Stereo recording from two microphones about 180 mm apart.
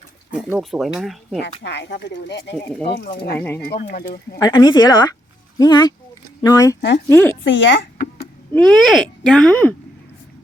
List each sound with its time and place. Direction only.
0.3 s speech: 5° right (ahead or behind)
1.6 s speech: 70° left (ahead or behind)
3.3 s speech: 10° left (ahead or behind)
3.7 s speech: 65° left (ahead or behind)
3.9 s speech: 55° left (ahead or behind)
4.4 s a woman's voice: 20° left (ahead or behind)
7.4 s speech: 90° left
8.5 s speech: 5° left (ahead or behind)